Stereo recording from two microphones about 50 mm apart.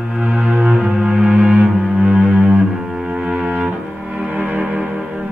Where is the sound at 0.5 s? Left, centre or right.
Centre.